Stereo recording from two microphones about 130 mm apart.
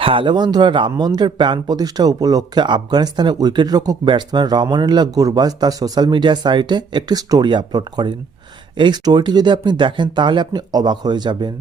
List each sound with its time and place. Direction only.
0.0 s speech: 40° right (ahead or behind)